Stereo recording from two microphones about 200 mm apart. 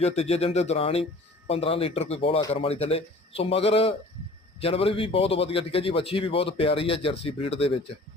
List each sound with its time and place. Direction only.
0.0 s a man's voice: 30° left (ahead or behind)